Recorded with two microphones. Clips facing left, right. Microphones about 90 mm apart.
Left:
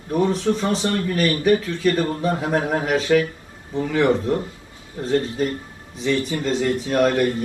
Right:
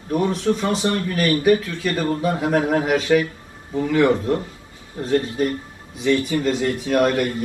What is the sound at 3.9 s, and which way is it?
A man's voice, 25° left (ahead or behind).